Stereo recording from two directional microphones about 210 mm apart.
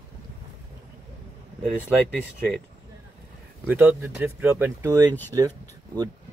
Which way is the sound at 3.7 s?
5° right (ahead or behind).